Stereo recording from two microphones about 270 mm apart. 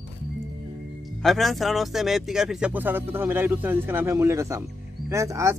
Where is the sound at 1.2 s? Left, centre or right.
Centre.